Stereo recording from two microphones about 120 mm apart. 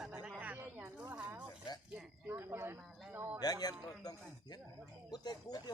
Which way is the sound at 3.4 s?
30° left (ahead or behind).